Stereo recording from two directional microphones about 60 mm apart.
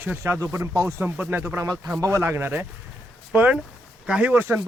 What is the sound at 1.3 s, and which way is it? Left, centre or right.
Speech, right.